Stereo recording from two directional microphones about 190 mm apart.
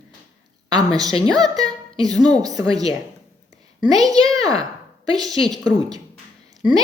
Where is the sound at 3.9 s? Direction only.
20° right (ahead or behind).